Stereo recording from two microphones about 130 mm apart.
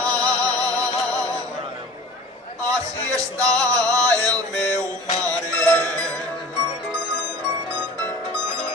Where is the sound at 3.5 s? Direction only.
5° left (ahead or behind).